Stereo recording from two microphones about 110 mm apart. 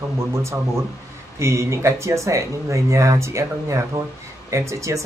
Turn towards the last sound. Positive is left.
turn(degrees=-25)  # may be behind; listen again after turning